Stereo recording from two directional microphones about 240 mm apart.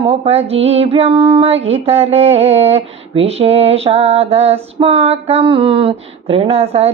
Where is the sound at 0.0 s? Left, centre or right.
Right.